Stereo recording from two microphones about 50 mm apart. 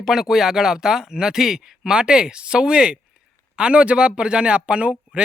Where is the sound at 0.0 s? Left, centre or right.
Centre.